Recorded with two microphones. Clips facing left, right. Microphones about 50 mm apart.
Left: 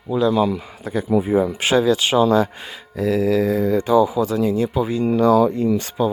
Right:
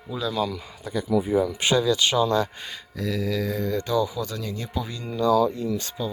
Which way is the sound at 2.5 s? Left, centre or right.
Centre.